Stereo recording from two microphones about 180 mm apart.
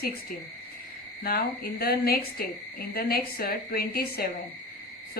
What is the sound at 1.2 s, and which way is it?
Speech, 55° left (ahead or behind).